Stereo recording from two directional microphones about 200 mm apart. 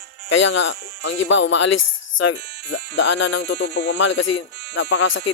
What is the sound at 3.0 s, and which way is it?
Speech, 65° left (ahead or behind).